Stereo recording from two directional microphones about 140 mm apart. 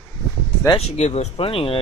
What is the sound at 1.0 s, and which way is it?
Speech, 50° left (ahead or behind).